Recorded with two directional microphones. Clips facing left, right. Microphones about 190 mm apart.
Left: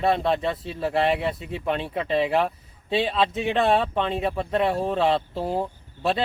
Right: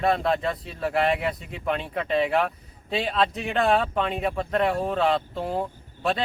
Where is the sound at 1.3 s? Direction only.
30° left (ahead or behind).